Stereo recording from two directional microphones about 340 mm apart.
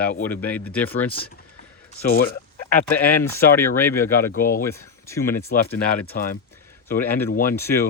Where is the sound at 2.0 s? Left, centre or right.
Left.